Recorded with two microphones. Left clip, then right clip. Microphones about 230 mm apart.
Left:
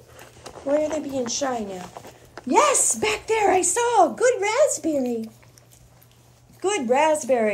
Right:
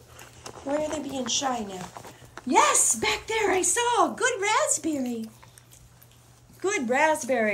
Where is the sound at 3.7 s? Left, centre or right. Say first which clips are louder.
Left 5 dB; right.